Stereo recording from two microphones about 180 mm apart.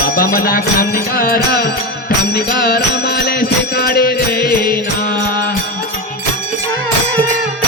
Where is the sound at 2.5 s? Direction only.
55° left (ahead or behind).